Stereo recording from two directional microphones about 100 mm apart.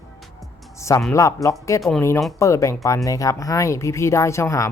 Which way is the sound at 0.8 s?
30° left (ahead or behind).